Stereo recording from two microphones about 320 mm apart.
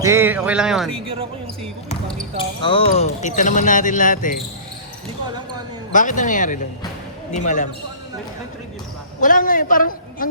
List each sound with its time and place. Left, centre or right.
0.0 s speech: centre
1.0 s speech: centre
2.6 s speech: centre
5.9 s speech: left
9.2 s speech: left